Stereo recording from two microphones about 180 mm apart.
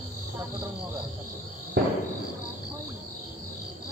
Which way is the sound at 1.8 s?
60° right (ahead or behind).